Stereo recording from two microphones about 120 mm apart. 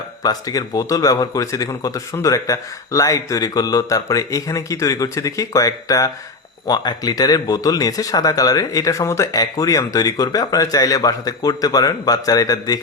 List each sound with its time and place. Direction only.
0.2 s speech: 30° left (ahead or behind)